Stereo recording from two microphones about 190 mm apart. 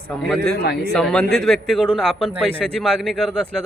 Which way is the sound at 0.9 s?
5° left (ahead or behind).